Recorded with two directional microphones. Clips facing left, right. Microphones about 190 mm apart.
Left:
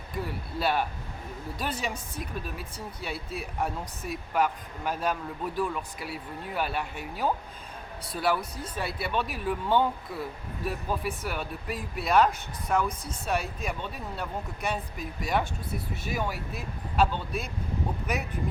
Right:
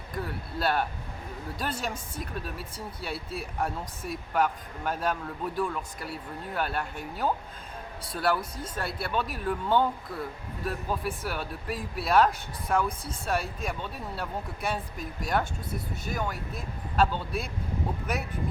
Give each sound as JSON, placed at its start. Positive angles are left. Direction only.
{"t": 0.2, "sound": "speech", "side_deg": 0}